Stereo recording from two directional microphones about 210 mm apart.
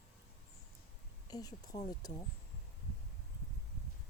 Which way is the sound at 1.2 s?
20° left (ahead or behind).